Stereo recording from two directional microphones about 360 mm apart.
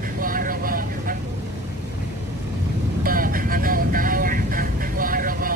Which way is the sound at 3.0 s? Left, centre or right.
Right.